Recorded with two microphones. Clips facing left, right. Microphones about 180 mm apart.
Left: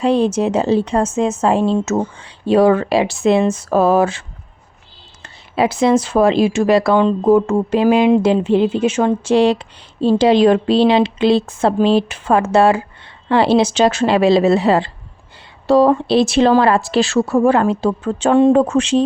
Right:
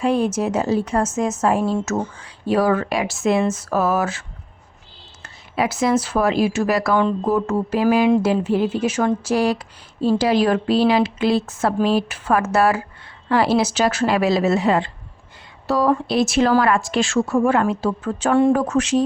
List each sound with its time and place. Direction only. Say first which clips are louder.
0.0 s speech: left 4 dB; 30° left (ahead or behind)
5.2 s a woman's voice: left 5 dB; 30° left (ahead or behind)